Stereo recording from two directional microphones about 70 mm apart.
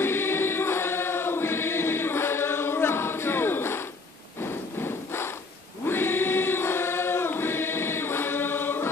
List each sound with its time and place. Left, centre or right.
0.0 s choir: left
4.4 s a sound: left
5.9 s choir: left